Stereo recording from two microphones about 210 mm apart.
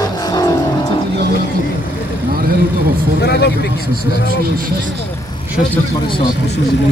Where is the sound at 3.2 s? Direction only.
50° left (ahead or behind).